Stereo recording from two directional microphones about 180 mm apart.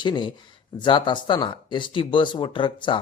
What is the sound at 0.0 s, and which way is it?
Speech, 25° left (ahead or behind).